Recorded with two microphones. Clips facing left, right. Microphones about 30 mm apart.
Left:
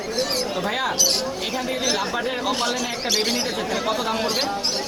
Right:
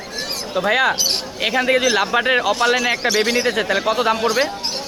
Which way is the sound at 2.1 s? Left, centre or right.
Right.